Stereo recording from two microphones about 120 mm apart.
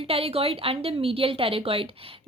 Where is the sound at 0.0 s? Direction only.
55° right (ahead or behind).